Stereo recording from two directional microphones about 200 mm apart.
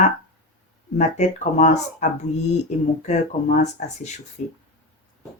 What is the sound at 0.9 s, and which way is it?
Speech, 35° left (ahead or behind).